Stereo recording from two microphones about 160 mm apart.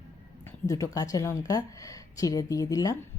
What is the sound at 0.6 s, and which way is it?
Speech, 20° left (ahead or behind).